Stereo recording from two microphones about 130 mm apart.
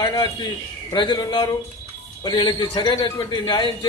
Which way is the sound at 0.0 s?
30° left (ahead or behind).